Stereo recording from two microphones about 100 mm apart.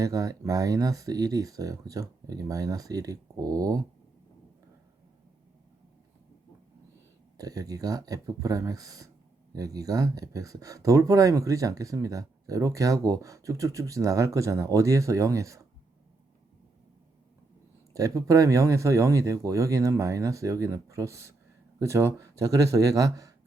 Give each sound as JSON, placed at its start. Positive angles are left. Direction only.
{"t": 0.0, "sound": "speech", "side_deg": -35}
{"t": 7.3, "sound": "speech", "side_deg": -35}
{"t": 17.9, "sound": "speech", "side_deg": -35}